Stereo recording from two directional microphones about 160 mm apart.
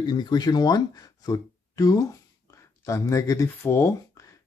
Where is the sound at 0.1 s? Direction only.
25° left (ahead or behind).